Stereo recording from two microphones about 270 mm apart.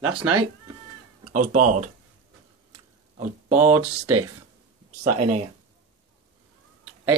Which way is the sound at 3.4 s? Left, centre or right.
Right.